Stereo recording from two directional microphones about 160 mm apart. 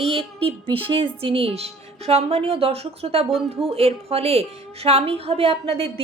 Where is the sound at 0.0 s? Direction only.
35° right (ahead or behind).